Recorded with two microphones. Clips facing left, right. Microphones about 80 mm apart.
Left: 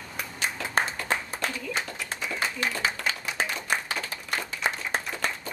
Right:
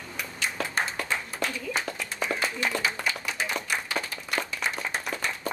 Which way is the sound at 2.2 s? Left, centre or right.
Right.